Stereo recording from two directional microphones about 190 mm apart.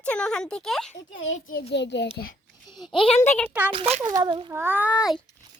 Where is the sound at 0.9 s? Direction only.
90° left.